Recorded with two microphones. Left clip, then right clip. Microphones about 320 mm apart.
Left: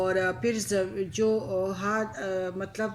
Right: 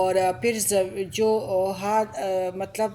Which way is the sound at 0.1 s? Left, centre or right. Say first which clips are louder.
Right 4 dB; centre.